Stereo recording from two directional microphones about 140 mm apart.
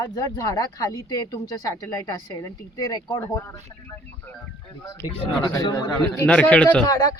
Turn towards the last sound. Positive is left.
turn(degrees=25)  # may be behind; listen again after turning